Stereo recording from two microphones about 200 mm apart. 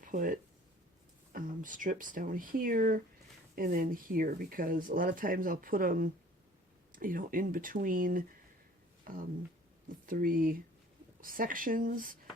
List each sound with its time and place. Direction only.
0.0 s speech: 40° right (ahead or behind)